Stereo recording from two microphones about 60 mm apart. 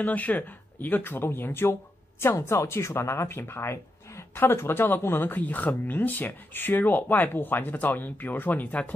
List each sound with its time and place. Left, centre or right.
0.0 s speech: left